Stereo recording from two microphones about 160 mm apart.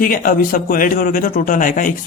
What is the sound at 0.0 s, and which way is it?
A man's voice, 60° left (ahead or behind).